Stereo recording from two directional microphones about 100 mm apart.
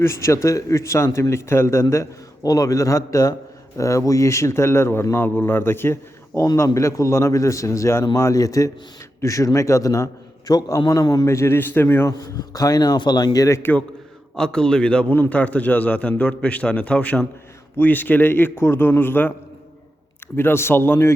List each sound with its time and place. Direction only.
0.0 s a man's voice: 30° left (ahead or behind)
11.3 s speech: 25° left (ahead or behind)
12.2 s a man's voice: 40° left (ahead or behind)
13.6 s speech: 20° left (ahead or behind)
14.3 s a man's voice: 5° left (ahead or behind)
20.3 s speech: 25° left (ahead or behind)